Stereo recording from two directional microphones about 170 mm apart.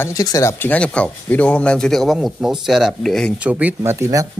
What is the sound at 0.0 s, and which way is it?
Speech, 20° left (ahead or behind).